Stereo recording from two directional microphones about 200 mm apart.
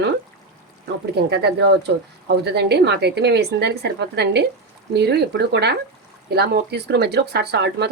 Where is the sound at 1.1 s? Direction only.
55° right (ahead or behind).